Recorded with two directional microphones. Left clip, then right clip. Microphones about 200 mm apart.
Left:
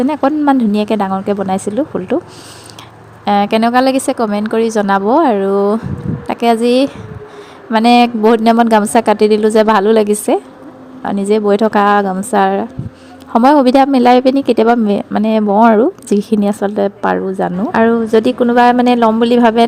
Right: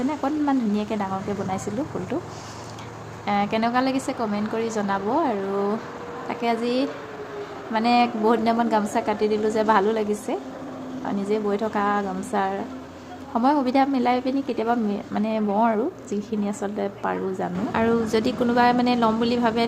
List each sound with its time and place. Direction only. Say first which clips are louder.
0.1 s a woman's voice: left 12 dB; 45° left (ahead or behind)
3.2 s a woman's voice: left 11 dB; 45° left (ahead or behind)